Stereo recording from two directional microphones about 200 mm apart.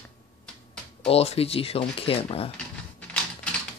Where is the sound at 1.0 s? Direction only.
30° left (ahead or behind).